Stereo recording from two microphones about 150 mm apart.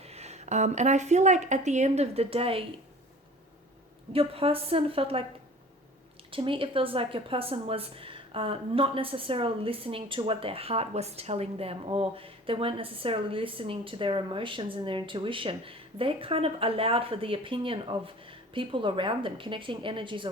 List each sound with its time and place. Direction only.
0.0 s a woman's voice: 45° right (ahead or behind)
4.1 s speech: 40° right (ahead or behind)
6.3 s speech: 35° right (ahead or behind)